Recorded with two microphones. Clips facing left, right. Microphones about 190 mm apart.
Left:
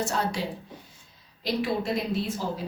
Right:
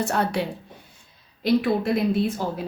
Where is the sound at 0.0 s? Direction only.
60° right (ahead or behind).